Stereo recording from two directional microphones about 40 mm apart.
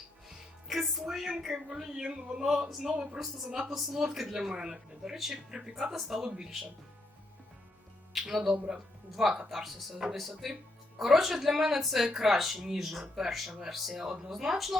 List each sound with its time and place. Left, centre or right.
0.7 s speech: centre
2.6 s a woman's voice: centre
4.5 s speech: centre
5.1 s speech: centre
8.1 s a woman's voice: centre